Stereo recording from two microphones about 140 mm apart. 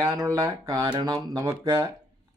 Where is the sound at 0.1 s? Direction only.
25° right (ahead or behind).